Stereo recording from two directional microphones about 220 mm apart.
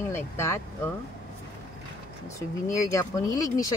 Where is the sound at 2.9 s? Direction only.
15° left (ahead or behind).